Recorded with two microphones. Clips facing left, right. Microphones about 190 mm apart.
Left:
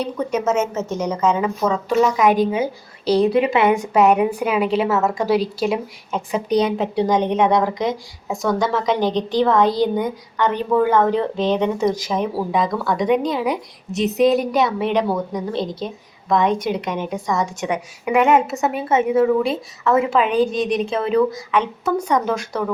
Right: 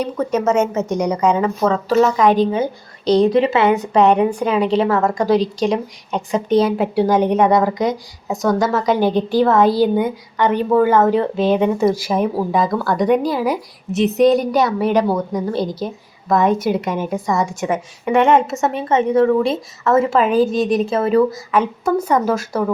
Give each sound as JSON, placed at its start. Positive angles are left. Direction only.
{"t": 0.2, "sound": "a woman's voice", "side_deg": 10}
{"t": 0.7, "sound": "a woman's voice", "side_deg": -15}
{"t": 1.4, "sound": "a woman's voice", "side_deg": 0}
{"t": 20.9, "sound": "speech", "side_deg": -45}
{"t": 21.5, "sound": "a woman's voice", "side_deg": -5}